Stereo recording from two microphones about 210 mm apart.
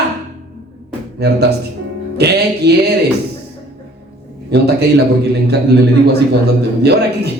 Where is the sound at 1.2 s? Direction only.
50° right (ahead or behind).